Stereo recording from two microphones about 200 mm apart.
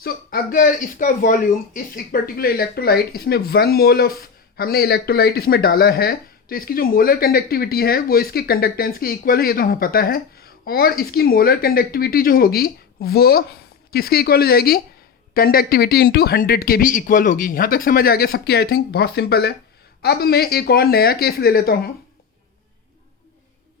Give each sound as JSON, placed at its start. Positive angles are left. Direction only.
{"t": 0.0, "sound": "speech", "side_deg": 45}